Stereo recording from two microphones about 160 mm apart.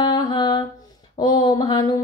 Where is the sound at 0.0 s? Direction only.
25° left (ahead or behind).